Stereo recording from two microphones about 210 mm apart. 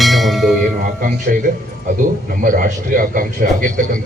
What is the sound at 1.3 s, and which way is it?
A man's voice, 40° right (ahead or behind).